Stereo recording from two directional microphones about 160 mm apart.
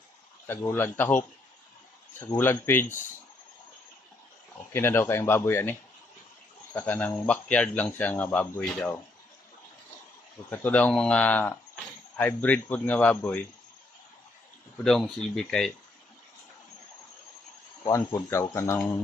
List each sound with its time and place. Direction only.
0.4 s speech: 15° left (ahead or behind)
4.7 s speech: 15° left (ahead or behind)
6.7 s speech: 10° left (ahead or behind)
10.5 s speech: 10° left (ahead or behind)
14.8 s speech: 5° left (ahead or behind)
17.8 s speech: 15° left (ahead or behind)